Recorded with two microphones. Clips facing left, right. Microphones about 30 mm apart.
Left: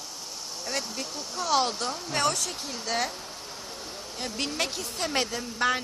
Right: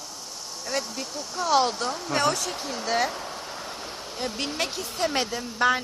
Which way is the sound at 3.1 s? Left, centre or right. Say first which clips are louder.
Right 5 dB; right.